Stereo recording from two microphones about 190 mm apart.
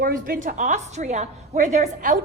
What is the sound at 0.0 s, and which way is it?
A woman's voice, 45° right (ahead or behind).